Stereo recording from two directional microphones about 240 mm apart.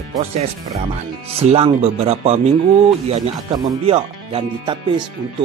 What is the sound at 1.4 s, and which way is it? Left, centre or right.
Speech, right.